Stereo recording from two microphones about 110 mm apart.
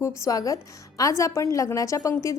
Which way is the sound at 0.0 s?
35° left (ahead or behind).